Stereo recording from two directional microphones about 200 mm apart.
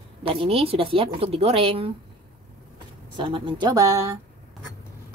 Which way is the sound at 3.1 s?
25° right (ahead or behind).